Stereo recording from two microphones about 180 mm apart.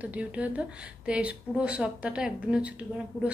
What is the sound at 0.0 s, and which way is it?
Speech, 10° right (ahead or behind).